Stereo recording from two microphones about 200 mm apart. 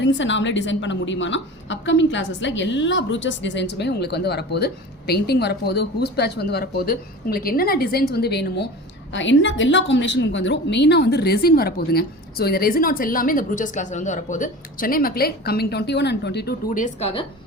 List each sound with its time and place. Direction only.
0.0 s a woman's voice: 65° left (ahead or behind)
9.1 s a woman's voice: 65° left (ahead or behind); by 17.2 s 30° left (ahead or behind)